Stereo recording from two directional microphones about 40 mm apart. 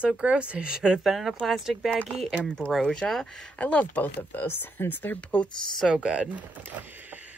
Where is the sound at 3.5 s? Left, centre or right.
Left.